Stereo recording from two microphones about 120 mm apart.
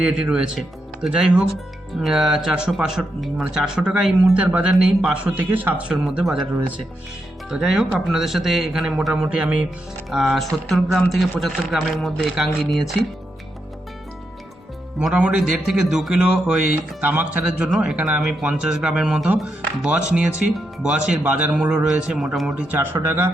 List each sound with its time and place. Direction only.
0.0 s speech: 10° right (ahead or behind)
7.5 s speech: 5° right (ahead or behind)
14.9 s speech: 5° right (ahead or behind)